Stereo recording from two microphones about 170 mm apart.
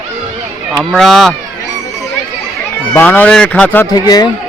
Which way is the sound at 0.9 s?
Centre (ahead or behind).